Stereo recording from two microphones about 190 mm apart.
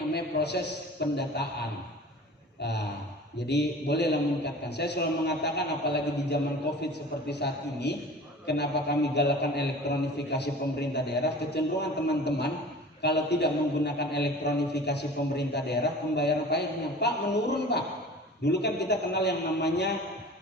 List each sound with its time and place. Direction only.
0.1 s a man's voice: 60° left (ahead or behind)
2.6 s a man's voice: 60° left (ahead or behind)